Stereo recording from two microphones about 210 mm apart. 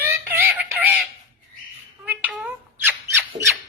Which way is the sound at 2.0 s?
5° right (ahead or behind).